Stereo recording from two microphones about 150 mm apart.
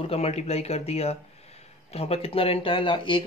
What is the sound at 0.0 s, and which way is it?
Speech, 40° left (ahead or behind).